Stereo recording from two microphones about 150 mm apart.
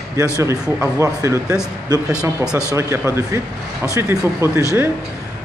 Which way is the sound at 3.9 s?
20° right (ahead or behind).